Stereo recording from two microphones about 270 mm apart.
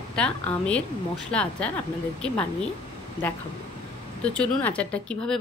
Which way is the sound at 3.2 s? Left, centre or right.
Right.